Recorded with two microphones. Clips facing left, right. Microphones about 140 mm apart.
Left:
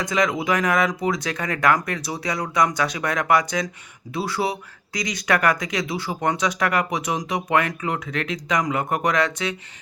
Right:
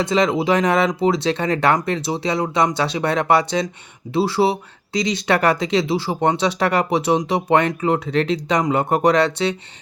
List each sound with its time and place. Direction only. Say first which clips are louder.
0.0 s speech: right 5 dB; 30° right (ahead or behind)